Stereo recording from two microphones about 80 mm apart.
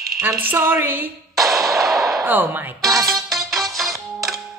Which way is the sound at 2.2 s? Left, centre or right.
Right.